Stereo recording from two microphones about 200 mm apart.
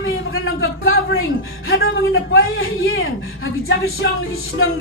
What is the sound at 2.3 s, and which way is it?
Speech, 85° left.